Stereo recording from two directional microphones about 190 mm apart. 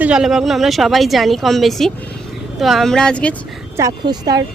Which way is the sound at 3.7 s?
20° right (ahead or behind).